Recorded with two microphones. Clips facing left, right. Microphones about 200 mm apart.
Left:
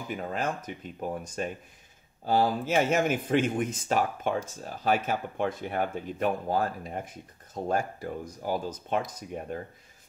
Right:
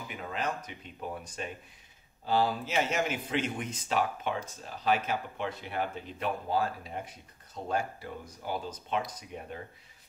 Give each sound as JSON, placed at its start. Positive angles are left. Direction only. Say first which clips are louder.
{"t": 0.1, "sound": "speech", "louder": "left 4 dB", "side_deg": 45}